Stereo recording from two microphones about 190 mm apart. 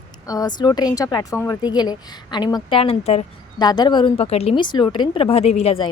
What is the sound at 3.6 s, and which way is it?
Speech, 20° left (ahead or behind).